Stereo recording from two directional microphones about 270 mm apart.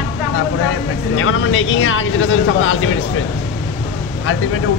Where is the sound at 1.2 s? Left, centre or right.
Left.